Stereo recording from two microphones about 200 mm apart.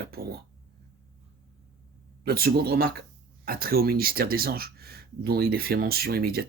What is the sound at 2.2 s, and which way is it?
Speech, 50° right (ahead or behind).